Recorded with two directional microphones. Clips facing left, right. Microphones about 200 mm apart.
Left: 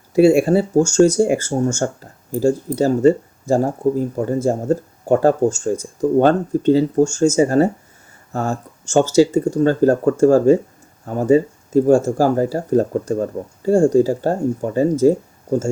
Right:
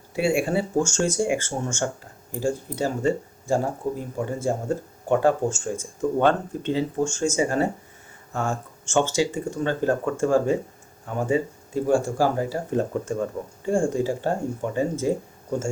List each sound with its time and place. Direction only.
0.1 s speech: 40° left (ahead or behind)